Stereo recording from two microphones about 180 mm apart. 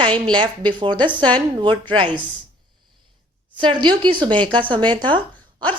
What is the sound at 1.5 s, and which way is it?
Speech, 25° right (ahead or behind).